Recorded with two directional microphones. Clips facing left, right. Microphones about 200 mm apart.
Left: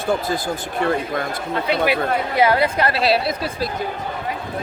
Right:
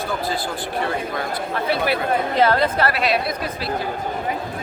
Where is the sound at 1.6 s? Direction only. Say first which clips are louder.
Left 2 dB; 15° left (ahead or behind).